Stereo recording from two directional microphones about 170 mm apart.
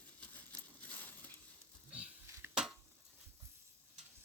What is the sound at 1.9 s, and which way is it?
Dishes, 5° right (ahead or behind).